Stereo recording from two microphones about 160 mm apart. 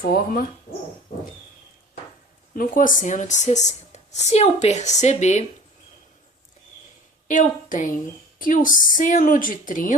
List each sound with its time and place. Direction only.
0.0 s speech: 70° left (ahead or behind)
2.6 s speech: 60° left (ahead or behind)
7.3 s a woman's voice: 55° left (ahead or behind)